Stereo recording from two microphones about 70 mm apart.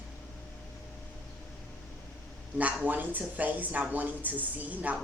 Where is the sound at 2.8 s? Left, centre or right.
Right.